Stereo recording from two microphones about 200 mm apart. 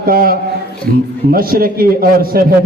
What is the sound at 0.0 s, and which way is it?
A man's voice, 45° right (ahead or behind).